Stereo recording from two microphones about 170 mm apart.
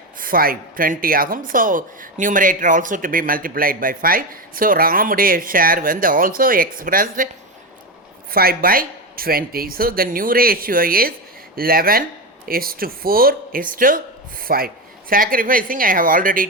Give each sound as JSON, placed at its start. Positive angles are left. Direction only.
{"t": 0.2, "sound": "a woman's voice", "side_deg": -55}
{"t": 8.3, "sound": "a woman's voice", "side_deg": -60}